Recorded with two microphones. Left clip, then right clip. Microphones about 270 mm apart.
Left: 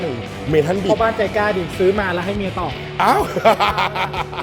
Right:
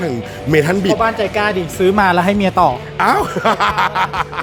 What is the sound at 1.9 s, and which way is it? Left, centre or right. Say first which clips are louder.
Speech: right 8 dB; right.